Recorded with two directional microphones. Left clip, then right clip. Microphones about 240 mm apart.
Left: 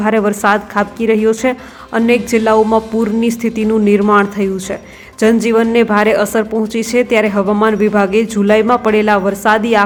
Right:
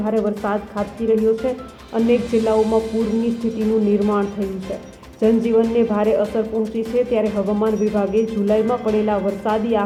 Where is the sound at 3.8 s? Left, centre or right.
Left.